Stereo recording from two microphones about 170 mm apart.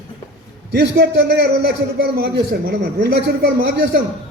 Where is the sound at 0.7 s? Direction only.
90° right.